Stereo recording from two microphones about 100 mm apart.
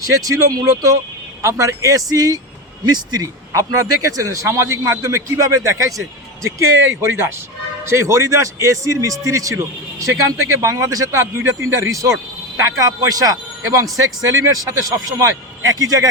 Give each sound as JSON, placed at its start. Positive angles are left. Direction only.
{"t": 0.0, "sound": "a man's voice", "side_deg": -35}